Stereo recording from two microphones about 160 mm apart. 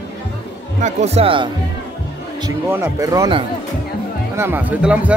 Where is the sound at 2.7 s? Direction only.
20° right (ahead or behind).